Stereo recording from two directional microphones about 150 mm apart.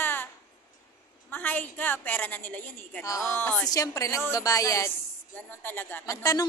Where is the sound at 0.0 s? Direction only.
15° left (ahead or behind).